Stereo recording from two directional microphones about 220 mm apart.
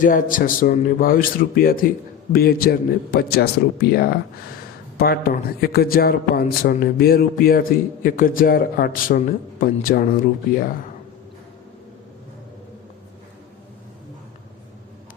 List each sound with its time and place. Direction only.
0.0 s a man's voice: 40° left (ahead or behind)